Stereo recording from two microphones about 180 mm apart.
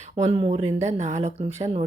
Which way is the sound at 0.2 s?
35° right (ahead or behind).